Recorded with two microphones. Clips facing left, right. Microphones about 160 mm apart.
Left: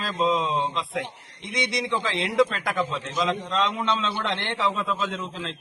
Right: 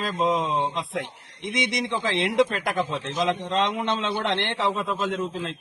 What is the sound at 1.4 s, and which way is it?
Speech, 20° right (ahead or behind).